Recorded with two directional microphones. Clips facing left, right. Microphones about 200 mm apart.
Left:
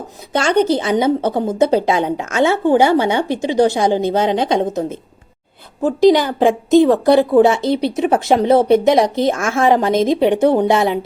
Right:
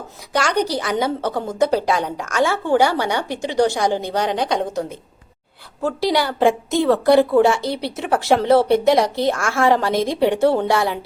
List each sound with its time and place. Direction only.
0.3 s a woman's voice: 25° left (ahead or behind)